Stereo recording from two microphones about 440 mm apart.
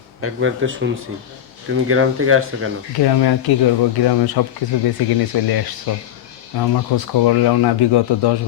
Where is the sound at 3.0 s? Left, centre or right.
Left.